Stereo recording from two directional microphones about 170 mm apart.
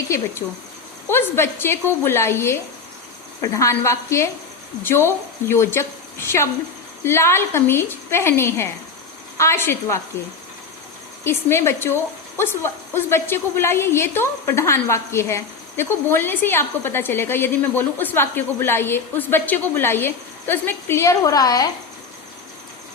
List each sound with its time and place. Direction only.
1.0 s a woman's voice: 15° left (ahead or behind)
11.2 s a woman's voice: 15° left (ahead or behind)